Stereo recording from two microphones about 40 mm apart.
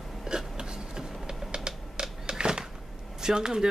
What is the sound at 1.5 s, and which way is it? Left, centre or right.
Typewriter, right.